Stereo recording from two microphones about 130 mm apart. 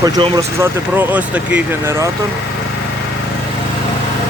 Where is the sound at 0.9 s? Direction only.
10° right (ahead or behind).